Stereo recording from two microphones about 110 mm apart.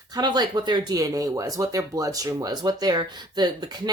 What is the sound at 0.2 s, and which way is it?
Speech, 40° right (ahead or behind).